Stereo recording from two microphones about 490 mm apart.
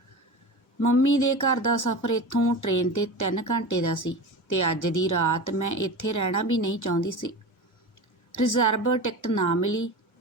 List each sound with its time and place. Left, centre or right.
1.2 s speech: left
8.4 s speech: left